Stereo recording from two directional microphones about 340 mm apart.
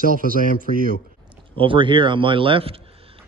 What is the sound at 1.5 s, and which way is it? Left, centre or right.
Speech, centre.